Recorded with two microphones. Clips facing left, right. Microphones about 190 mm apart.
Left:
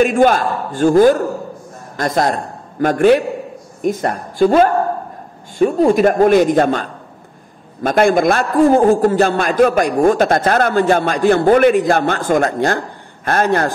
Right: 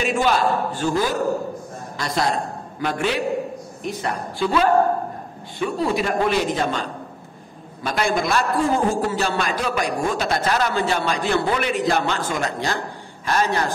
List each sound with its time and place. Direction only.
0.0 s a man's voice: 50° left (ahead or behind)